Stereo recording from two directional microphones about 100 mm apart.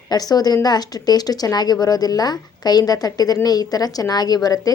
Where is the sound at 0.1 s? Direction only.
40° left (ahead or behind).